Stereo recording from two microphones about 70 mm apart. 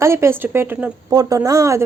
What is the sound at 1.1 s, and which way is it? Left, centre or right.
Speech, right.